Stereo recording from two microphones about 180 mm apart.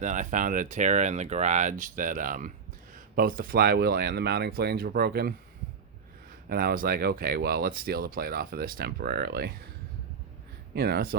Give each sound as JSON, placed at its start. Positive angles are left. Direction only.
{"t": 0.0, "sound": "speech", "side_deg": -45}
{"t": 6.5, "sound": "speech", "side_deg": -55}
{"t": 10.8, "sound": "speech", "side_deg": -60}